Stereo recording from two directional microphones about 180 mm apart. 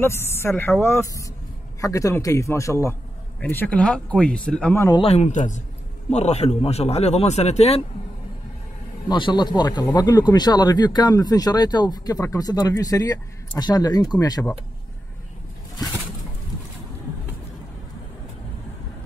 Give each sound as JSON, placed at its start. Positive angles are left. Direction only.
{"t": 0.0, "sound": "a man's voice", "side_deg": 15}
{"t": 4.9, "sound": "a man's voice", "side_deg": 35}
{"t": 9.1, "sound": "speech", "side_deg": 25}